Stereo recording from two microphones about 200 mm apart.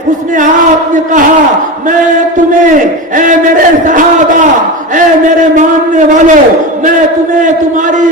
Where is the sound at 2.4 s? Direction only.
40° right (ahead or behind).